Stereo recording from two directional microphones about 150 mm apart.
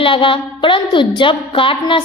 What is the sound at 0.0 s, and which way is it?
A woman's voice, 35° left (ahead or behind).